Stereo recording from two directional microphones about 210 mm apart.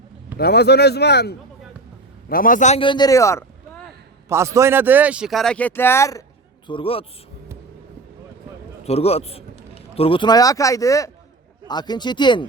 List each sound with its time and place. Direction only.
0.3 s a man's voice: 50° left (ahead or behind); by 3.4 s 15° left (ahead or behind)
4.3 s speech: 15° right (ahead or behind); by 6.2 s 15° left (ahead or behind)
6.7 s a man's voice: 25° left (ahead or behind)
8.8 s a man's voice: 30° left (ahead or behind)